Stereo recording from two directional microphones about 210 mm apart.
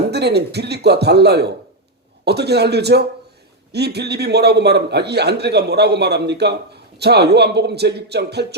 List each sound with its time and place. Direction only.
0.1 s a man's voice: 50° right (ahead or behind)